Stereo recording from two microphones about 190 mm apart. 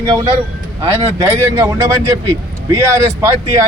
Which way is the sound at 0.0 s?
25° right (ahead or behind).